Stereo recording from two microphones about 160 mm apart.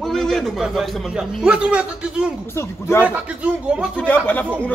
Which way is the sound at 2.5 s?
15° left (ahead or behind).